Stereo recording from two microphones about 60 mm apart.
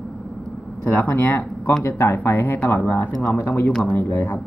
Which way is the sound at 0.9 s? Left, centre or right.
Left.